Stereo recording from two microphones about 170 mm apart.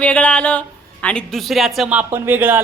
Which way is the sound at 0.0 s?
5° left (ahead or behind).